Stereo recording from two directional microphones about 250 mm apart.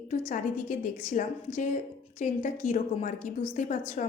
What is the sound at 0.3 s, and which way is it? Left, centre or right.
A woman's voice, left.